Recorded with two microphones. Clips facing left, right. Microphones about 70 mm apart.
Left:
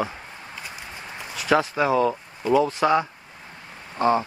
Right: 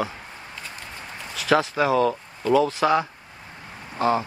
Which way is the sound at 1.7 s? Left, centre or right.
Left.